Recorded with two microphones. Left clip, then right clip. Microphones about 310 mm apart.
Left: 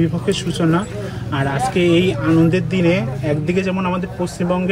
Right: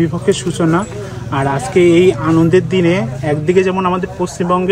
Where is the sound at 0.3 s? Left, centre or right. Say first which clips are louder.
Right 5 dB; centre.